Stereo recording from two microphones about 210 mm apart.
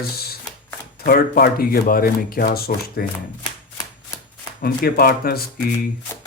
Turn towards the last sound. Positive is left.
turn(degrees=45)  # may be behind; listen again after turning